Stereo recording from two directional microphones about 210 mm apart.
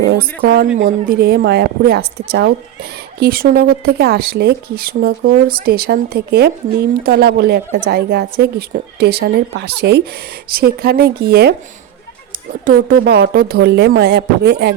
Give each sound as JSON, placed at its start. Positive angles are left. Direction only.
{"t": 0.1, "sound": "speech", "side_deg": -45}
{"t": 12.6, "sound": "speech", "side_deg": -45}